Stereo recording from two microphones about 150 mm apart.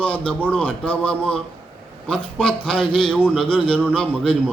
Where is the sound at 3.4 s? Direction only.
35° left (ahead or behind).